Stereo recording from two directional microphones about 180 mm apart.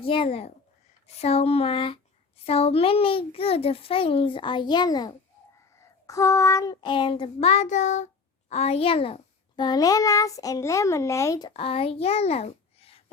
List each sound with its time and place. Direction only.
0.0 s a child's voice: 30° left (ahead or behind)